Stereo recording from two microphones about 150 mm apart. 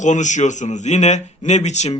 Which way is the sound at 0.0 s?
55° left (ahead or behind).